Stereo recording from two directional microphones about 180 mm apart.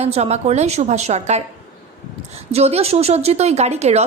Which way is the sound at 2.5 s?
35° right (ahead or behind).